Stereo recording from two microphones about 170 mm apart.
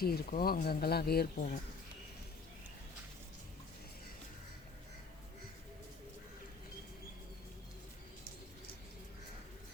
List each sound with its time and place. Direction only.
0.0 s speech: 65° left (ahead or behind)